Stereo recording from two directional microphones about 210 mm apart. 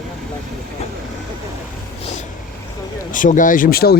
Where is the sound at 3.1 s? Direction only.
40° left (ahead or behind).